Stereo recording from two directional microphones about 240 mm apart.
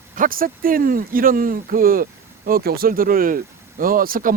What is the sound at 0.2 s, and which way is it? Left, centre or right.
Speech, right.